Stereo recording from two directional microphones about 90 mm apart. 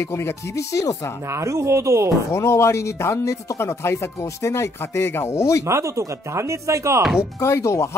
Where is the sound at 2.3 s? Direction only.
30° left (ahead or behind).